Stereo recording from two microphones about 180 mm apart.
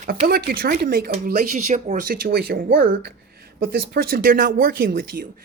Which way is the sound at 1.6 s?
45° right (ahead or behind).